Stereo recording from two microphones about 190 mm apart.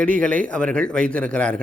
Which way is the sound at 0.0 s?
5° left (ahead or behind).